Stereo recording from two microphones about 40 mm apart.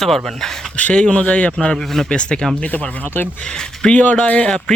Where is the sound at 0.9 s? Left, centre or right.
Left.